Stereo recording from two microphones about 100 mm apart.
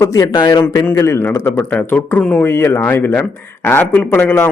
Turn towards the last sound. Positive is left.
turn(degrees=20)  # may be behind; listen again after turning